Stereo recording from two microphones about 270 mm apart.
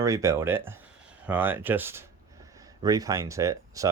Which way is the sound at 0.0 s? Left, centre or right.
Centre.